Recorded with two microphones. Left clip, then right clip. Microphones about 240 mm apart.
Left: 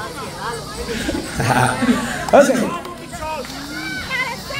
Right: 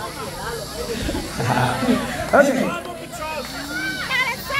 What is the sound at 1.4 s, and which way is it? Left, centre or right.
Speech, centre.